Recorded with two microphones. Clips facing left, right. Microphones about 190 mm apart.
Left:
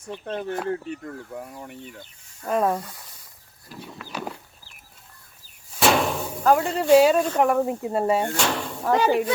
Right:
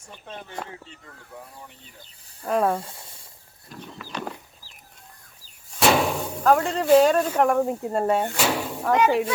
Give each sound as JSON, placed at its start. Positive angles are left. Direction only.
{"t": 0.3, "sound": "speech", "side_deg": 65}
{"t": 2.5, "sound": "speech", "side_deg": 0}
{"t": 2.7, "sound": "speech", "side_deg": -25}
{"t": 3.7, "sound": "speech", "side_deg": 5}
{"t": 4.1, "sound": "chicken", "side_deg": 5}
{"t": 5.8, "sound": "door", "side_deg": 0}
{"t": 7.3, "sound": "speech", "side_deg": 5}
{"t": 8.4, "sound": "speech", "side_deg": -10}
{"t": 8.9, "sound": "speech", "side_deg": 30}